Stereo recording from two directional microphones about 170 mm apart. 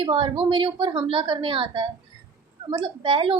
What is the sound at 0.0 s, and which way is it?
A woman's voice, 30° right (ahead or behind).